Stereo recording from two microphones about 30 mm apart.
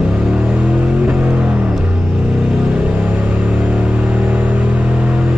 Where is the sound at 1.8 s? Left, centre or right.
Right.